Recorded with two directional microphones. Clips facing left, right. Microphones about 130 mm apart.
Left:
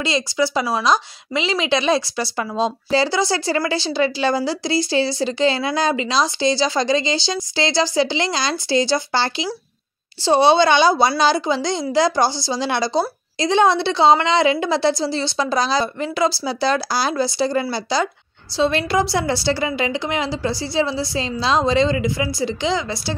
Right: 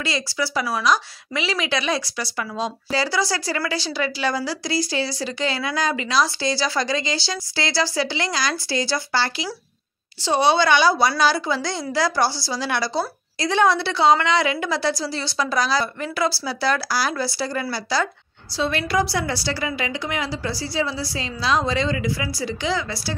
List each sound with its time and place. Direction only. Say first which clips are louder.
0.0 s speech: left 5 dB; 20° left (ahead or behind)